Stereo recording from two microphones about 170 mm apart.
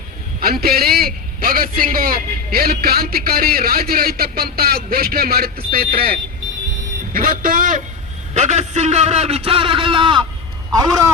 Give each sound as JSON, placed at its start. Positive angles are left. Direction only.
{"t": 0.3, "sound": "a man's voice", "side_deg": -60}